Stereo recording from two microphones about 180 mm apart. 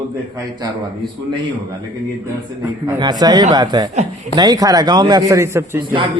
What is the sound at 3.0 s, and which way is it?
A man's voice, 20° right (ahead or behind).